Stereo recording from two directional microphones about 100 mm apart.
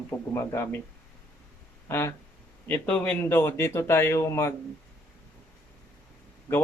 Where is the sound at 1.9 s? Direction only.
25° left (ahead or behind).